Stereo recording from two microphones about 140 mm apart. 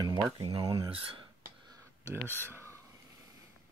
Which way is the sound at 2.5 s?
20° right (ahead or behind).